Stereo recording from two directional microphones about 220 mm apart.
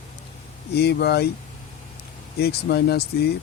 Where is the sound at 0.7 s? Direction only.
50° left (ahead or behind).